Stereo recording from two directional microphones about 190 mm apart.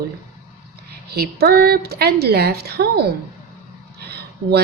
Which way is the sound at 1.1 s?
55° right (ahead or behind).